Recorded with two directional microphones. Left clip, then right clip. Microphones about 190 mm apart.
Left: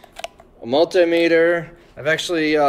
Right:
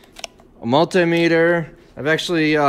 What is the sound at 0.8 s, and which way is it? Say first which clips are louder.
Speech: left 3 dB; 20° right (ahead or behind).